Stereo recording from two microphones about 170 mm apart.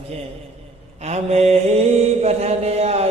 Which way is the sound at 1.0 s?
40° right (ahead or behind).